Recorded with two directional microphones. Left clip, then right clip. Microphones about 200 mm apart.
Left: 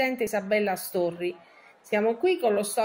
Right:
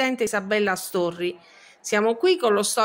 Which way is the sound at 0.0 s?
60° right (ahead or behind).